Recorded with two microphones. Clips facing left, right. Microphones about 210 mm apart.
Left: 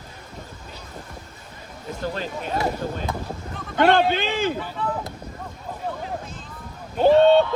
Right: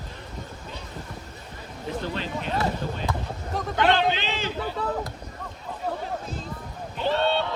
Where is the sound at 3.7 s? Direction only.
50° left (ahead or behind).